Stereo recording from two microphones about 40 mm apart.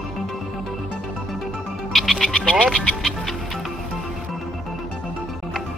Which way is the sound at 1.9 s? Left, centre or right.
Centre.